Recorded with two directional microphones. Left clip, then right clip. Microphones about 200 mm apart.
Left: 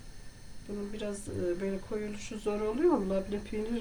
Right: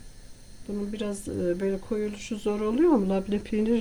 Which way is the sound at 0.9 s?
50° right (ahead or behind).